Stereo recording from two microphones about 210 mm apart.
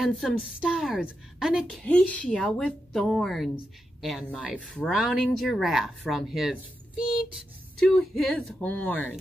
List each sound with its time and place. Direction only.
0.0 s speech: centre (ahead or behind)